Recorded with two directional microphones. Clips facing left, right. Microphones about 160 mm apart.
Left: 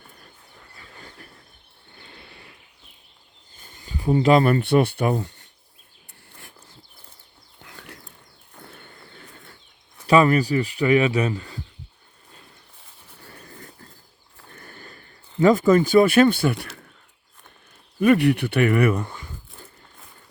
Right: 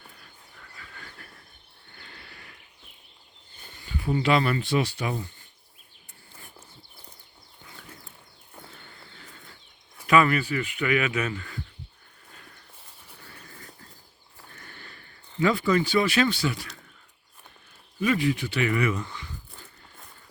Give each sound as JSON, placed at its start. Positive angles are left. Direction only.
{"t": 0.8, "sound": "a sound", "side_deg": 30}
{"t": 2.0, "sound": "horse", "side_deg": 20}
{"t": 3.8, "sound": "speech", "side_deg": 35}
{"t": 4.6, "sound": "speech", "side_deg": 60}
{"t": 7.6, "sound": "a sound", "side_deg": 70}
{"t": 10.1, "sound": "speech", "side_deg": 35}
{"t": 13.2, "sound": "a sound", "side_deg": 35}
{"t": 15.4, "sound": "speech", "side_deg": 45}
{"t": 18.0, "sound": "speech", "side_deg": 60}